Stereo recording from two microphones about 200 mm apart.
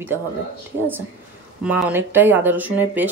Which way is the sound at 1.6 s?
5° right (ahead or behind).